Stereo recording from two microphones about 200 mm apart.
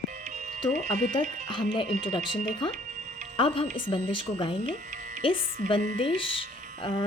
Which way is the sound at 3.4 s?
25° left (ahead or behind).